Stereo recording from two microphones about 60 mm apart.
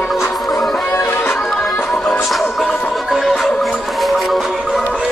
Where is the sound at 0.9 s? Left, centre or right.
Left.